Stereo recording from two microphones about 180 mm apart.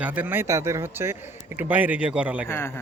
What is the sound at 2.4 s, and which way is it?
Speech, 15° left (ahead or behind).